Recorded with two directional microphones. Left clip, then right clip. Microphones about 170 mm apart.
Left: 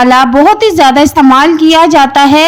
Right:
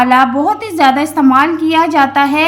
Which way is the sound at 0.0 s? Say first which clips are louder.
Left 5 dB; 50° left (ahead or behind).